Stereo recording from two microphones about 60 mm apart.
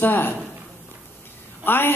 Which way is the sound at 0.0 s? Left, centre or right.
Left.